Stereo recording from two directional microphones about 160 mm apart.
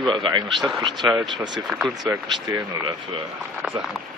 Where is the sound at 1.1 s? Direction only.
25° right (ahead or behind).